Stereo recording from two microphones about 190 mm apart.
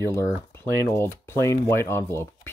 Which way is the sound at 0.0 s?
15° left (ahead or behind).